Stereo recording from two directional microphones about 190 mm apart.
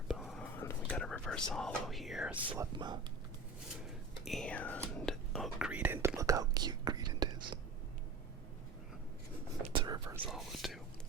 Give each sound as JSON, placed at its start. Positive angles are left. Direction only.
{"t": 0.1, "sound": "whispering", "side_deg": 0}
{"t": 2.6, "sound": "speech", "side_deg": -20}
{"t": 4.3, "sound": "speech", "side_deg": 5}
{"t": 4.9, "sound": "whispering", "side_deg": 0}
{"t": 9.7, "sound": "whispering", "side_deg": -20}
{"t": 10.2, "sound": "speech", "side_deg": 0}